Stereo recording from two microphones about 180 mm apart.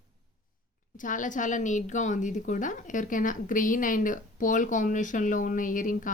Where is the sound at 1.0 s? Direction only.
45° left (ahead or behind).